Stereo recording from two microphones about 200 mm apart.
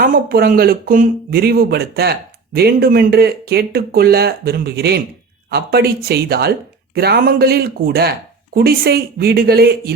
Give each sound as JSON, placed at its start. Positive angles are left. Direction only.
{"t": 0.0, "sound": "speech", "side_deg": -45}